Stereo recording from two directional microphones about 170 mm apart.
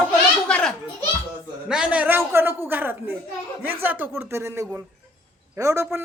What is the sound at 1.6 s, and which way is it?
A man's voice, 5° right (ahead or behind).